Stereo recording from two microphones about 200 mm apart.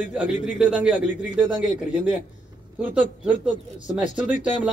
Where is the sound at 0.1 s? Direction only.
5° right (ahead or behind).